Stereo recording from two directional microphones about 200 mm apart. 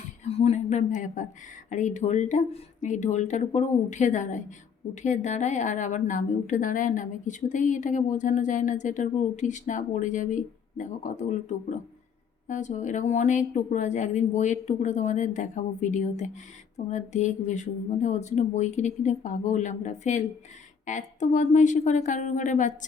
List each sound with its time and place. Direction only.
0.3 s a woman's voice: 30° left (ahead or behind)